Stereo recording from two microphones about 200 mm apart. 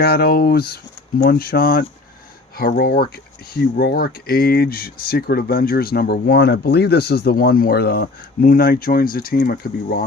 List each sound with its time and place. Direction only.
0.0 s speech: 50° left (ahead or behind)